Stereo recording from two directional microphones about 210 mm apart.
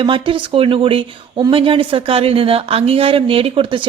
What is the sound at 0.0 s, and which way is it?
Speech, 25° right (ahead or behind).